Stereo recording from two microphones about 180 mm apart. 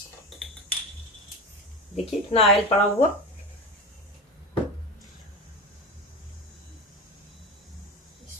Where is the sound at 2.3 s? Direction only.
35° left (ahead or behind).